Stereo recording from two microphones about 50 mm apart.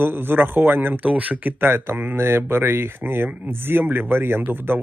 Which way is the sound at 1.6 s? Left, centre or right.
Right.